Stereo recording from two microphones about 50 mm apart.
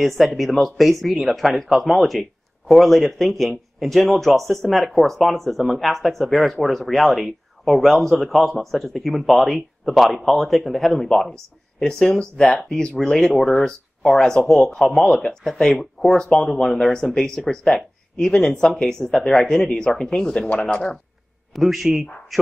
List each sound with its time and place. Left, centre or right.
0.0 s speech: centre; by 20.9 s left
21.5 s speech: centre